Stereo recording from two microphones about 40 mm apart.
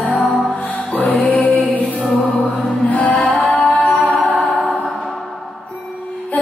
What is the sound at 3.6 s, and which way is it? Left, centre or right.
Music, left.